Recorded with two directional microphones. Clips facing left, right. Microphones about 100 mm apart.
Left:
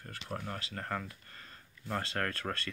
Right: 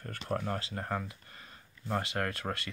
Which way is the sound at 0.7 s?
20° right (ahead or behind).